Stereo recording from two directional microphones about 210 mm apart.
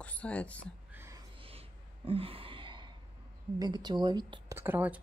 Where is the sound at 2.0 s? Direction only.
25° right (ahead or behind).